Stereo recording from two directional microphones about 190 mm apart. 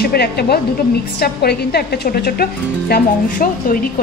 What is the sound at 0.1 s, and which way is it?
A woman's voice, 55° left (ahead or behind).